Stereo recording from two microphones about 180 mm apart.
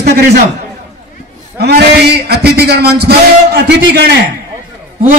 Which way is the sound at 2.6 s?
60° right (ahead or behind).